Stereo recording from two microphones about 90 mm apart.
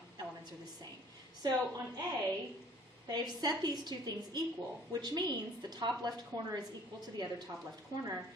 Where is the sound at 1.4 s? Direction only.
45° right (ahead or behind).